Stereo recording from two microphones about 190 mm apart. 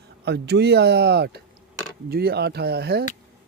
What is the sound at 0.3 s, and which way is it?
Speech, 60° right (ahead or behind).